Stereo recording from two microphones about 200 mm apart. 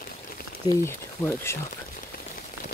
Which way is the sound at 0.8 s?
10° left (ahead or behind).